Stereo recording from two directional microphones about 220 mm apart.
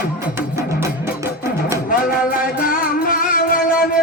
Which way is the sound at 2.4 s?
40° left (ahead or behind).